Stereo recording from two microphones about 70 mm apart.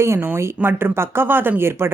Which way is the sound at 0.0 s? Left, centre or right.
Right.